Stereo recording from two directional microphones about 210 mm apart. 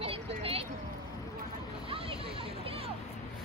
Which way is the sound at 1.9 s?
25° right (ahead or behind).